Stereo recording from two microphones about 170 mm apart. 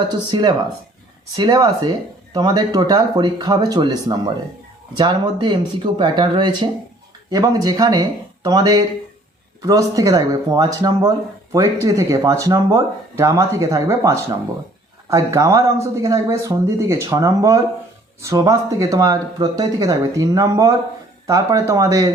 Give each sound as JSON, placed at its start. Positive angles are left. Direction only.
{"t": 0.1, "sound": "speech", "side_deg": -25}